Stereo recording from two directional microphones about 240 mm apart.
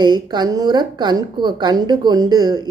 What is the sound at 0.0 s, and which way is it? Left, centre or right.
A woman's voice, centre.